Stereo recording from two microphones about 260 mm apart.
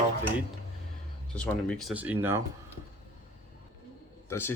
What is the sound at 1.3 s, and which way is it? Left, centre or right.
Speech, centre.